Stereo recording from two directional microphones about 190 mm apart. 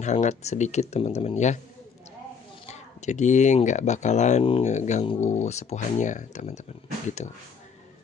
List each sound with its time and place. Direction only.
0.0 s speech: 35° left (ahead or behind)
2.7 s speech: 40° left (ahead or behind)